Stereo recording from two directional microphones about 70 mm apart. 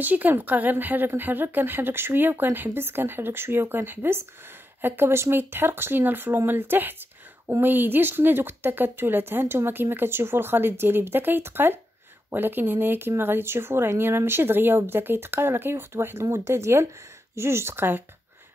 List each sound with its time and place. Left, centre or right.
0.0 s speech: right